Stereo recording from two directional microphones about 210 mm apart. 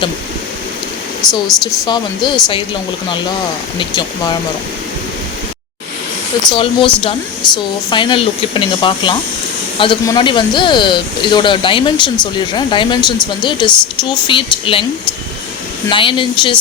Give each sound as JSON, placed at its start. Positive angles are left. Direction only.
{"t": 1.3, "sound": "speech", "side_deg": 0}
{"t": 1.8, "sound": "speech", "side_deg": 20}
{"t": 3.8, "sound": "speech", "side_deg": 20}
{"t": 6.5, "sound": "speech", "side_deg": 25}
{"t": 15.9, "sound": "speech", "side_deg": 25}